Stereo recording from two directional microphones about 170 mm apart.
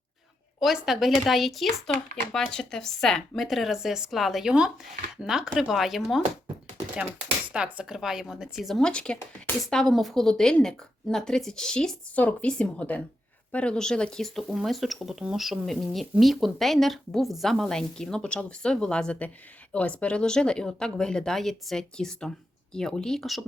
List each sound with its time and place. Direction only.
0.6 s speech: centre (ahead or behind)
7.5 s speech: 5° right (ahead or behind)